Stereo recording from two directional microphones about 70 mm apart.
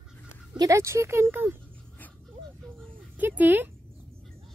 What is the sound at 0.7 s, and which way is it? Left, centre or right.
Speech, right.